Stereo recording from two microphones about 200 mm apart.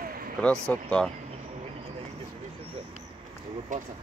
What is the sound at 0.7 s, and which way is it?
Speech, 5° left (ahead or behind).